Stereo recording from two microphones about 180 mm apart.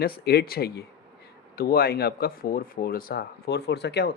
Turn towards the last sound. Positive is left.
turn(degrees=70)  # may be behind; listen again after turning